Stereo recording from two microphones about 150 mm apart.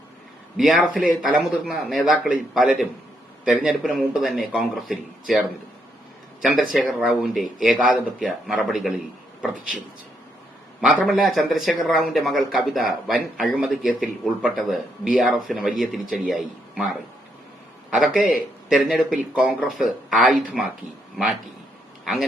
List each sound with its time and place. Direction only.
0.5 s speech: centre (ahead or behind)
6.4 s speech: 10° right (ahead or behind)
10.8 s speech: centre (ahead or behind)
22.0 s speech: centre (ahead or behind)